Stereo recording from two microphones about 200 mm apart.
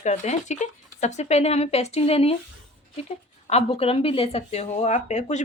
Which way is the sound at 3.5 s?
30° left (ahead or behind).